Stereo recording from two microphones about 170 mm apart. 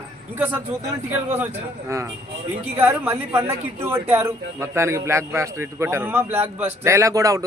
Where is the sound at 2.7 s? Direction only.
15° right (ahead or behind).